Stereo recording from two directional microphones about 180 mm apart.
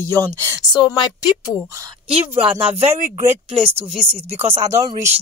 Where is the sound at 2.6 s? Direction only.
35° right (ahead or behind).